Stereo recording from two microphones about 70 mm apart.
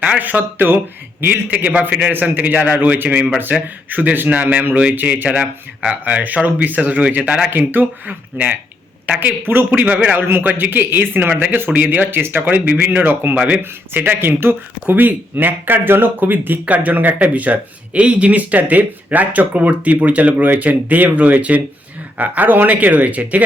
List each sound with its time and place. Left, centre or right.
0.0 s speech: right
7.5 s speech: right